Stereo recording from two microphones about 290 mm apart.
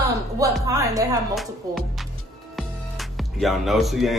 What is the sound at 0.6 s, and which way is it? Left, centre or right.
Speech, centre.